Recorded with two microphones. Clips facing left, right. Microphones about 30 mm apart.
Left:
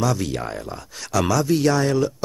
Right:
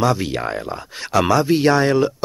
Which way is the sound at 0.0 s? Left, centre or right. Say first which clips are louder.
Right 4 dB; right.